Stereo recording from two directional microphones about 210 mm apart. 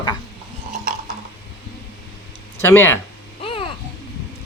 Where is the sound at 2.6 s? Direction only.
10° left (ahead or behind).